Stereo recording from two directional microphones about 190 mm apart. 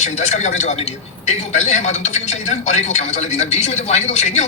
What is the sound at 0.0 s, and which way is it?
Speech, 40° left (ahead or behind).